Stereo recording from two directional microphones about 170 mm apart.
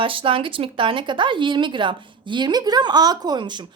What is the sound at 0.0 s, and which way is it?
A woman's voice, 30° right (ahead or behind).